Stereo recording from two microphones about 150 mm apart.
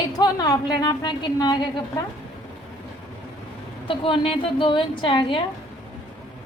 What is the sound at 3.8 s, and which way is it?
A woman's voice, 35° left (ahead or behind).